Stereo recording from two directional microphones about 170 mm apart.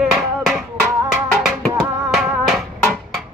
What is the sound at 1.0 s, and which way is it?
Music, centre (ahead or behind).